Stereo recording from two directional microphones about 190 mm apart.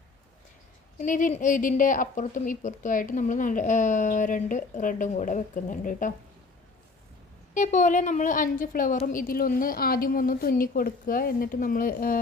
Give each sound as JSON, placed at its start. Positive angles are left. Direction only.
{"t": 0.9, "sound": "speech", "side_deg": 45}
{"t": 7.5, "sound": "a woman's voice", "side_deg": 40}